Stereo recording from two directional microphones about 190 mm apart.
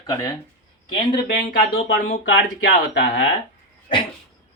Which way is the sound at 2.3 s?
75° left (ahead or behind).